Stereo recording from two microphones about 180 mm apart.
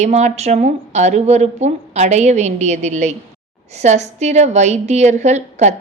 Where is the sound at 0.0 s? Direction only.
40° right (ahead or behind).